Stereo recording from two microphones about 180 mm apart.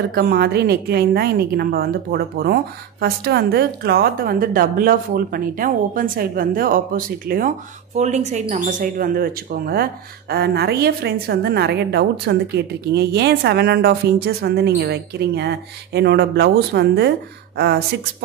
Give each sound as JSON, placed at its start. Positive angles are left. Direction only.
{"t": 0.1, "sound": "a woman's voice", "side_deg": -60}